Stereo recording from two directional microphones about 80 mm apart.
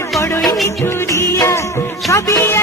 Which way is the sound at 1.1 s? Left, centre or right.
Left.